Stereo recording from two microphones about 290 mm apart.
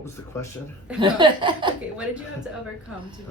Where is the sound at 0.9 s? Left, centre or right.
Centre.